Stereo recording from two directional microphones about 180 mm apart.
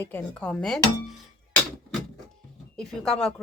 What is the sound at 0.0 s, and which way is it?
Speech, 10° left (ahead or behind).